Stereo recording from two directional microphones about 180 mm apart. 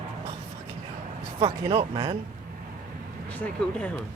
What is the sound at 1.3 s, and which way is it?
Speech, 30° right (ahead or behind).